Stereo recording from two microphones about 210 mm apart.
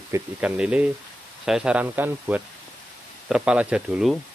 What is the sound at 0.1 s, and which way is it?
Speech, 5° right (ahead or behind).